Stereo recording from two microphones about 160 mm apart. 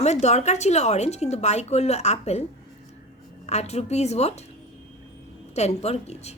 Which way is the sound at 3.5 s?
45° left (ahead or behind).